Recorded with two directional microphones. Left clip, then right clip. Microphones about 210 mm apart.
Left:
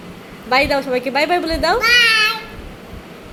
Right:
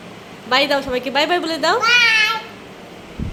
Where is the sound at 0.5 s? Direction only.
Centre (ahead or behind).